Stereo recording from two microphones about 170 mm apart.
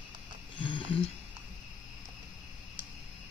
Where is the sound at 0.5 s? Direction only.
30° left (ahead or behind).